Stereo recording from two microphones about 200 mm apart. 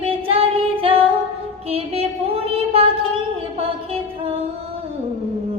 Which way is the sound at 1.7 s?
30° right (ahead or behind).